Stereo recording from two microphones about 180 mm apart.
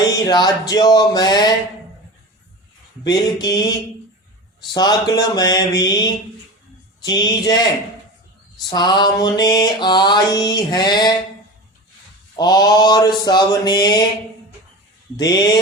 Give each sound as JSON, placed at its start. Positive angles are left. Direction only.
{"t": 0.0, "sound": "music", "side_deg": 20}
{"t": 3.0, "sound": "music", "side_deg": 20}
{"t": 4.7, "sound": "music", "side_deg": 25}
{"t": 8.7, "sound": "music", "side_deg": 25}
{"t": 12.4, "sound": "music", "side_deg": 25}
{"t": 15.1, "sound": "music", "side_deg": 20}